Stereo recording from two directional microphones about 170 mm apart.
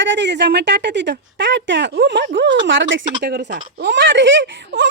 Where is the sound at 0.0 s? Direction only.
90° right.